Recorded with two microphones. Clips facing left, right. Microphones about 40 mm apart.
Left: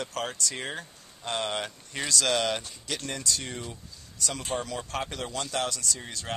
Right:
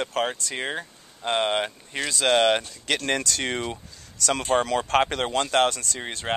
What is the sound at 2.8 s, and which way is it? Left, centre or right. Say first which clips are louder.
Speech: right 8 dB; right.